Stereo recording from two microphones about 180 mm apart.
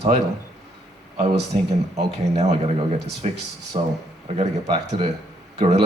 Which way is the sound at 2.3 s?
35° right (ahead or behind).